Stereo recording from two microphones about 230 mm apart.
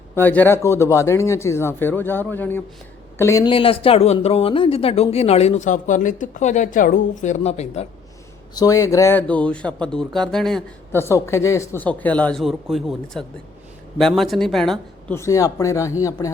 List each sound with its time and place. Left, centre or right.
0.2 s speech: centre; by 7.9 s left
8.5 s speech: centre
15.2 s speech: centre